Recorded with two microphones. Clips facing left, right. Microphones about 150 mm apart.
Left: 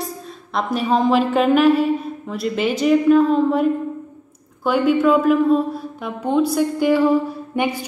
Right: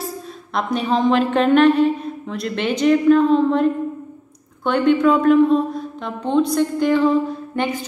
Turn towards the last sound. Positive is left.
turn(degrees=10)  # may be behind; listen again after turning